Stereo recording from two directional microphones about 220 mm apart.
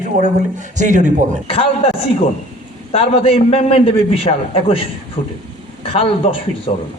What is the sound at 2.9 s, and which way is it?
A man's voice, 25° left (ahead or behind).